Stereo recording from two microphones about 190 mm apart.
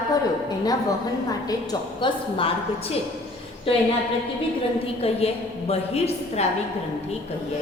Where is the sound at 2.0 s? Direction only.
30° left (ahead or behind).